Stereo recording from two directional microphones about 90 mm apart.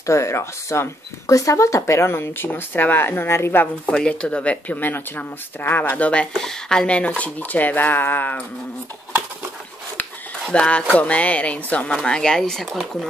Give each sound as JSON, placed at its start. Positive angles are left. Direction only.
{"t": 0.0, "sound": "speech", "side_deg": 30}
{"t": 3.8, "sound": "speech", "side_deg": 10}
{"t": 10.5, "sound": "speech", "side_deg": 10}